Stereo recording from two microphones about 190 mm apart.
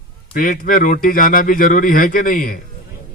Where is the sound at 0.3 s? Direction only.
45° left (ahead or behind).